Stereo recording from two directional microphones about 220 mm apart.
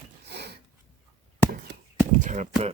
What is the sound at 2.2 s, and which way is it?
Speech, 35° right (ahead or behind).